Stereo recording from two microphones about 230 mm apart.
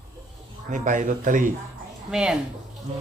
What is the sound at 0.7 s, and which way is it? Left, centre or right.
Speech, right.